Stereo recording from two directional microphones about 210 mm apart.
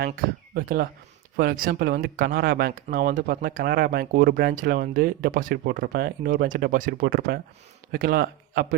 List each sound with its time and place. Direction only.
0.5 s a man's voice: 45° right (ahead or behind)